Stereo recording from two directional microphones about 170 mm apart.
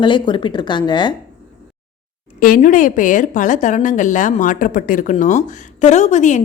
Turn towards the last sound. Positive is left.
turn(degrees=45)  # may be behind; listen again after turning